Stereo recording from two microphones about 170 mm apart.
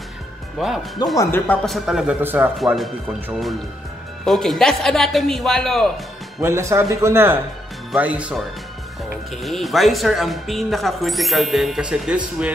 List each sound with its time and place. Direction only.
0.6 s speech: centre (ahead or behind)
1.1 s speech: 15° left (ahead or behind)
1.7 s speech: 5° right (ahead or behind)
2.6 s speech: centre (ahead or behind)
4.2 s speech: centre (ahead or behind)
6.4 s speech: 15° right (ahead or behind)